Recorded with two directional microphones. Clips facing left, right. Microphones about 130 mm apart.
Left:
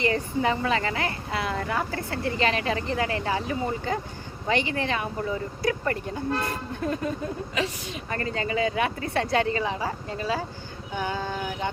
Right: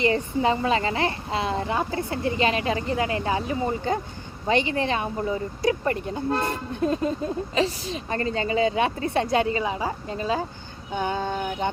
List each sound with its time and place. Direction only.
0.0 s speech: 20° right (ahead or behind)